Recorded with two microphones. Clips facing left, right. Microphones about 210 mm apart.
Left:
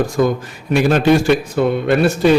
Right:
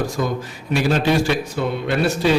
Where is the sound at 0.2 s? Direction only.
50° left (ahead or behind).